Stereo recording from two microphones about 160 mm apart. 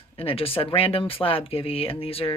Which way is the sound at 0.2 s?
35° left (ahead or behind).